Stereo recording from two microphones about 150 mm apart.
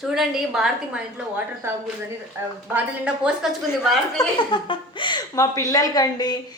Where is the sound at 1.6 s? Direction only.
15° right (ahead or behind).